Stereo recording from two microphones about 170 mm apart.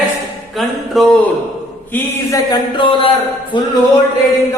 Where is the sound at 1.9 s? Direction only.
20° left (ahead or behind).